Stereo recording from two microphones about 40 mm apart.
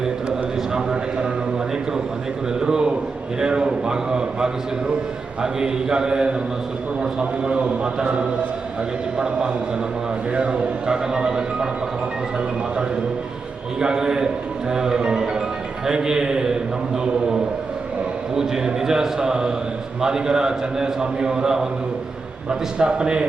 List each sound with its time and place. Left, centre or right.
0.0 s a sound: centre
2.6 s a man's voice: centre
13.7 s a man's voice: centre